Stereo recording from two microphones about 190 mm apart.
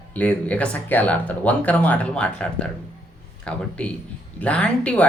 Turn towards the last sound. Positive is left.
turn(degrees=5)  # may be behind; listen again after turning